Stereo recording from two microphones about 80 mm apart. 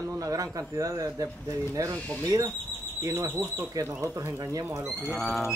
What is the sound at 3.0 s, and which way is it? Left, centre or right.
Speech, right.